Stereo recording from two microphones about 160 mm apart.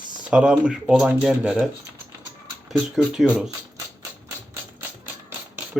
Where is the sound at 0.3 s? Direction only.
5° right (ahead or behind).